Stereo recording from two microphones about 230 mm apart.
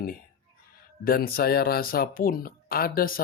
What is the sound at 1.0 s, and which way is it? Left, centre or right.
Speech, left.